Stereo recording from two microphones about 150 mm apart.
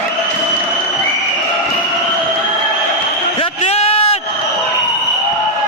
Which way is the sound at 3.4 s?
45° left (ahead or behind).